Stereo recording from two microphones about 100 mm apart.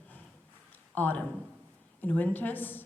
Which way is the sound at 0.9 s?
15° left (ahead or behind).